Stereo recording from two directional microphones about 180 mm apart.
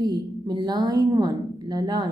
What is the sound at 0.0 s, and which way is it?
Speech, 25° right (ahead or behind).